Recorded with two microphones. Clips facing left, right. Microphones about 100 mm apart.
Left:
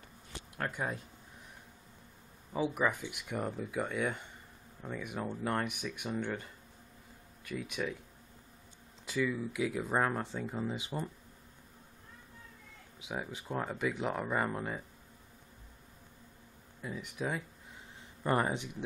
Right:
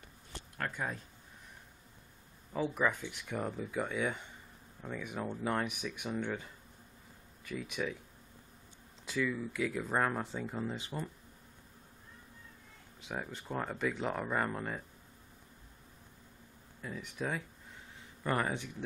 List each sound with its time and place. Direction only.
0.6 s speech: 15° left (ahead or behind)
2.5 s speech: 5° left (ahead or behind)
9.0 s speech: 5° left (ahead or behind)
10.8 s speech: 15° left (ahead or behind)
13.0 s speech: 5° left (ahead or behind)
16.8 s speech: 5° left (ahead or behind)
18.2 s speech: 25° left (ahead or behind)